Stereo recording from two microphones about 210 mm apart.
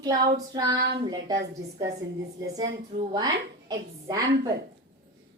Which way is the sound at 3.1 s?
20° right (ahead or behind).